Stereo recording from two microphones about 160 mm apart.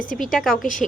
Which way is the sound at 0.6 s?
55° left (ahead or behind).